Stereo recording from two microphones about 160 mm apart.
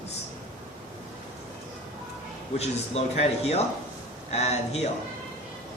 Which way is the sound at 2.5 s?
40° left (ahead or behind).